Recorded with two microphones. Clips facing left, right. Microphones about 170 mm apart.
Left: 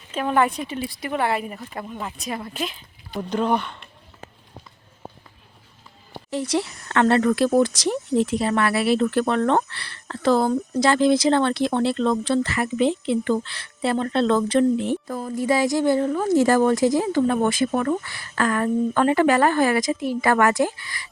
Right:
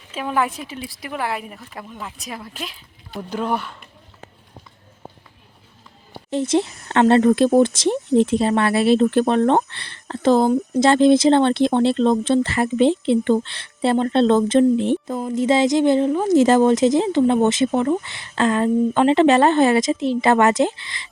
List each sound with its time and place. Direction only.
0.1 s speech: 5° right (ahead or behind)
6.3 s speech: 25° right (ahead or behind)